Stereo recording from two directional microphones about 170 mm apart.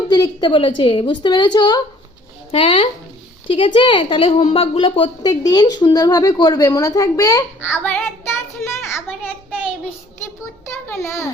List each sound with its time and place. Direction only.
0.1 s a woman's voice: 25° left (ahead or behind)
8.9 s a sound: 15° left (ahead or behind)
10.8 s a child's voice: 15° left (ahead or behind)